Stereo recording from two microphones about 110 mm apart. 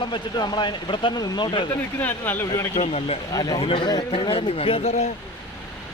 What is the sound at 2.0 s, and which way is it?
Speech, 15° left (ahead or behind).